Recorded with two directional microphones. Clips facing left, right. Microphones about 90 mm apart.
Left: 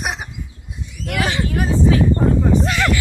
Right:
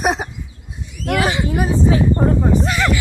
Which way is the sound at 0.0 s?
35° right (ahead or behind).